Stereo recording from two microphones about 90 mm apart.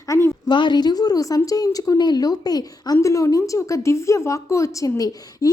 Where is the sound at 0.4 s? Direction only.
60° left (ahead or behind).